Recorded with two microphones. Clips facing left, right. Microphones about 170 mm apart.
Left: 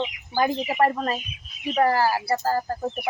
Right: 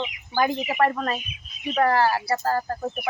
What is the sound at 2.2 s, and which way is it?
Speech, 30° left (ahead or behind).